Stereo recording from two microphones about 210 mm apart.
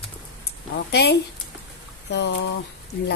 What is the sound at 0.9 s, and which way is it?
A woman's voice, 50° left (ahead or behind).